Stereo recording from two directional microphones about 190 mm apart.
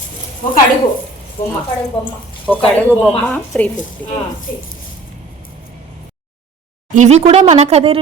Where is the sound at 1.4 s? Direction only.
45° left (ahead or behind).